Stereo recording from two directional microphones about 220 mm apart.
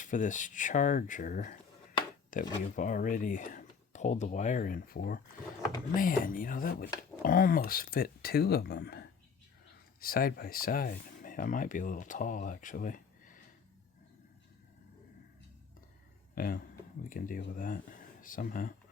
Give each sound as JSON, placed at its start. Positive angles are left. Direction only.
{"t": 0.0, "sound": "speech", "side_deg": 35}
{"t": 16.3, "sound": "speech", "side_deg": 40}